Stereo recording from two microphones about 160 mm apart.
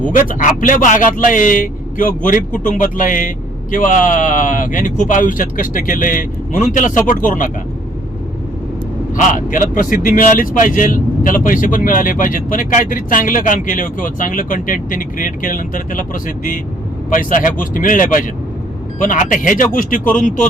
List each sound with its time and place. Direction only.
0.1 s speech: 55° left (ahead or behind)
9.1 s speech: 55° left (ahead or behind)